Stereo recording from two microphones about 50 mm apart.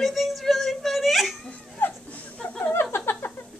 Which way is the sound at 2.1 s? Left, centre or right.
Left.